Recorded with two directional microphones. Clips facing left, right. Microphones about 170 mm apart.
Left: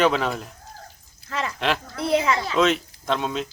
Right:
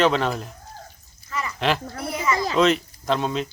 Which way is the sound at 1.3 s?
75° left (ahead or behind).